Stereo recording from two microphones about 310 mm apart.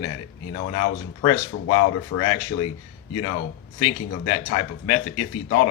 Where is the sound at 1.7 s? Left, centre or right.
Left.